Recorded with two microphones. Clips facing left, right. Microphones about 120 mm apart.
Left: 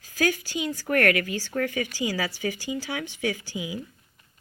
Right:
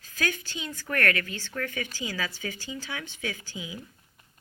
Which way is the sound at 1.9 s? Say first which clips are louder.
Left 6 dB; 10° left (ahead or behind).